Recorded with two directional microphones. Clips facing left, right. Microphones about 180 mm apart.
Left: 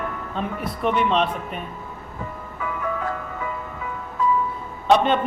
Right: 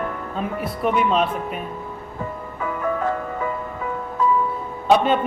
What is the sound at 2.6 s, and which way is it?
Music, 45° right (ahead or behind).